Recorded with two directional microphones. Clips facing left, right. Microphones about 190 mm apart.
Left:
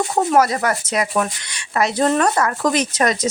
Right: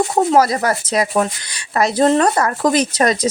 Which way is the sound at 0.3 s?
30° right (ahead or behind).